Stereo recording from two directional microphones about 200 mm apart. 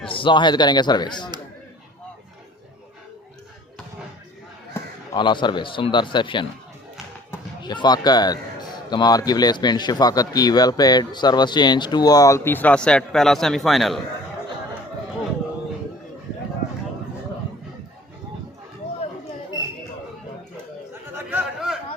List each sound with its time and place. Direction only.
0.1 s speech: 25° left (ahead or behind)
4.7 s speech: 25° left (ahead or behind); by 14.0 s centre (ahead or behind)
21.2 s a sound: 10° right (ahead or behind)